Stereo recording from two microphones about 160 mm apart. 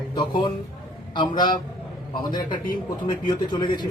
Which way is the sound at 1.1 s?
30° left (ahead or behind).